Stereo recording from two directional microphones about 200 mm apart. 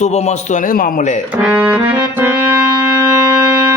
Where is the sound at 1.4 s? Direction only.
10° right (ahead or behind).